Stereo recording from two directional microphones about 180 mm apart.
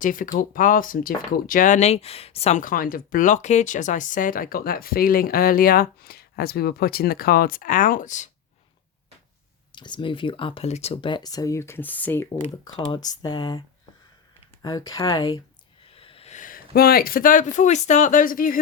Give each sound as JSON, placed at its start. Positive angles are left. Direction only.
{"t": 0.0, "sound": "speech", "side_deg": 50}
{"t": 9.7, "sound": "speech", "side_deg": 25}
{"t": 12.4, "sound": "speech", "side_deg": 25}
{"t": 14.6, "sound": "speech", "side_deg": 20}